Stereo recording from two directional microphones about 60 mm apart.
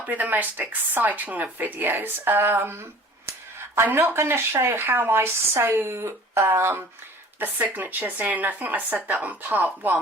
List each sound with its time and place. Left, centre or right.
0.0 s speech: right
3.9 s speech: right
7.3 s speech: right